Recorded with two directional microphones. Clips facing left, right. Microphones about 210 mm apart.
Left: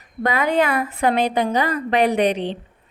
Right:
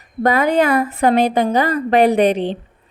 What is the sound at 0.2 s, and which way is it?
A woman's voice, 40° right (ahead or behind).